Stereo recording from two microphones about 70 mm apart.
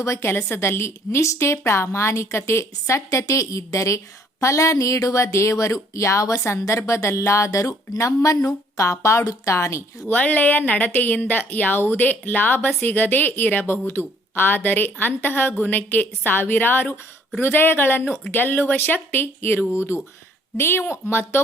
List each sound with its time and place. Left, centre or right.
0.0 s a woman's voice: left
10.1 s a woman's voice: left